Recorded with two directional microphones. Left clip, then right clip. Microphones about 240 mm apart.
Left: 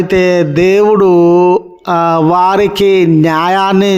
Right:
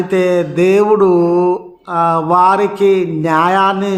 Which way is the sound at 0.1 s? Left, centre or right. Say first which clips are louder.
Left 3 dB; left.